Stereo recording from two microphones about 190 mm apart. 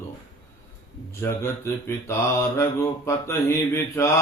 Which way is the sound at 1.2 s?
15° left (ahead or behind).